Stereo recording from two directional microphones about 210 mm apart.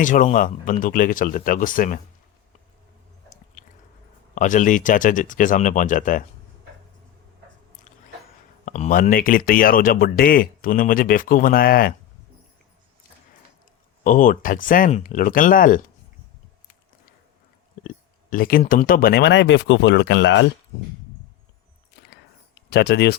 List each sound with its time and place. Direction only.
0.0 s speech: 40° left (ahead or behind)
3.6 s chewing: 40° left (ahead or behind)
4.4 s speech: 35° left (ahead or behind)
8.6 s speech: 35° left (ahead or behind)
14.0 s speech: 40° left (ahead or behind)
17.8 s speech: 40° left (ahead or behind); by 20.5 s 60° left (ahead or behind)
22.7 s speech: 50° left (ahead or behind)